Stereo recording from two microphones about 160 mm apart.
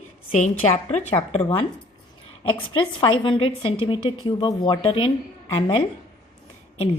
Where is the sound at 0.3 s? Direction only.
45° left (ahead or behind).